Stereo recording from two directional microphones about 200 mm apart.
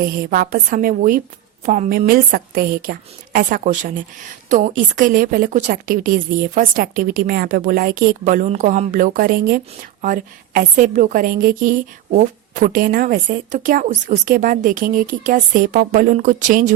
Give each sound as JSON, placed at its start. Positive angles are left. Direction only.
{"t": 0.0, "sound": "a woman's voice", "side_deg": -45}